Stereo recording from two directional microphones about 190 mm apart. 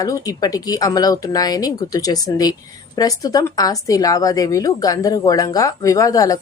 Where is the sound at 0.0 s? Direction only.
20° left (ahead or behind).